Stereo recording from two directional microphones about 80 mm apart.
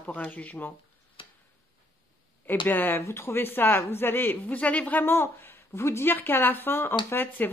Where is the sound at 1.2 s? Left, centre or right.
Left.